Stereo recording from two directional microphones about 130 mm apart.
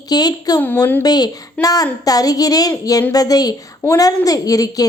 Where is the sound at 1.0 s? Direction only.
30° left (ahead or behind).